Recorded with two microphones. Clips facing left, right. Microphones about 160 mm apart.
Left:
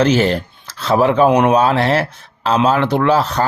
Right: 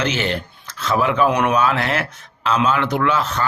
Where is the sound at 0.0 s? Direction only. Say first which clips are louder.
Left 8 dB; 35° left (ahead or behind).